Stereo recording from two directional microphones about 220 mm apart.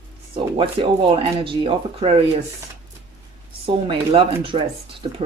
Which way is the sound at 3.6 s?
25° right (ahead or behind).